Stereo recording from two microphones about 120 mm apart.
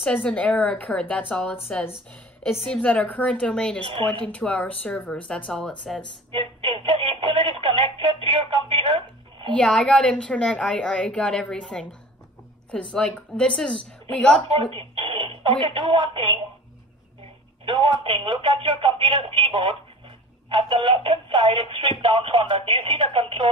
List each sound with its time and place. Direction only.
0.0 s a woman's voice: 10° left (ahead or behind)
6.3 s a sound: 50° right (ahead or behind)
8.2 s telephone: 45° right (ahead or behind)
9.6 s a woman's voice: 5° left (ahead or behind)
12.9 s a woman's voice: 5° left (ahead or behind)
14.5 s speech: 45° right (ahead or behind)
17.7 s speech: 45° right (ahead or behind)